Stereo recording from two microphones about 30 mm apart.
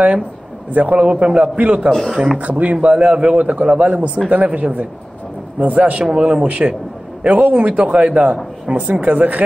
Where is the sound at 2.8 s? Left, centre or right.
Right.